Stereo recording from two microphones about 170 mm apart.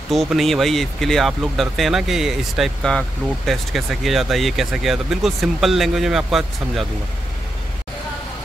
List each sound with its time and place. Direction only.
0.1 s speech: centre (ahead or behind)